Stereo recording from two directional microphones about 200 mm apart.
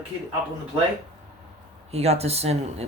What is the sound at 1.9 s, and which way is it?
Speech, 30° right (ahead or behind).